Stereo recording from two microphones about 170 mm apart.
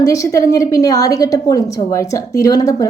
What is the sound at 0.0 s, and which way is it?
A woman's voice, 20° left (ahead or behind).